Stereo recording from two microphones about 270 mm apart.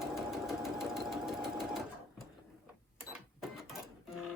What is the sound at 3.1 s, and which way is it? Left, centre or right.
Cash register, centre.